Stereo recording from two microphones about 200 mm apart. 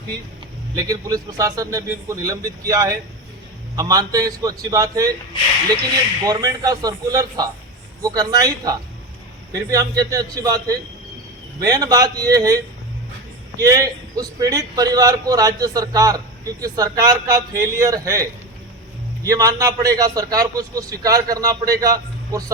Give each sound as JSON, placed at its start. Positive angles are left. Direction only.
{"t": 0.8, "sound": "a man's voice", "side_deg": -20}
{"t": 6.2, "sound": "a man's voice", "side_deg": -20}
{"t": 13.6, "sound": "a man's voice", "side_deg": -15}
{"t": 19.2, "sound": "a man's voice", "side_deg": -15}